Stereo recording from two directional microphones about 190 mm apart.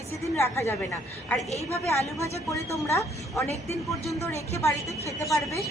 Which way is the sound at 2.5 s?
15° left (ahead or behind).